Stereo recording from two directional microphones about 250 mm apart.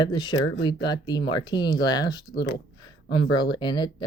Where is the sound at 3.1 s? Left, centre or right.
Centre.